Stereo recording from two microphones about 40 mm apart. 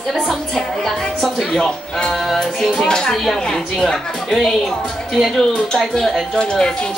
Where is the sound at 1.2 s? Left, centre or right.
Centre.